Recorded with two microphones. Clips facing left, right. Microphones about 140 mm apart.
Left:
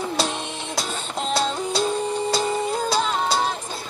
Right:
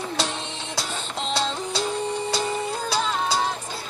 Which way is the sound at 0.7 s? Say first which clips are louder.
Left 2 dB; 10° left (ahead or behind).